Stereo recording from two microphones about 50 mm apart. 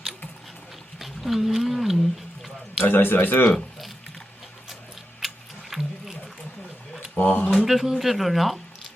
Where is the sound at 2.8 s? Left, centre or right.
Left.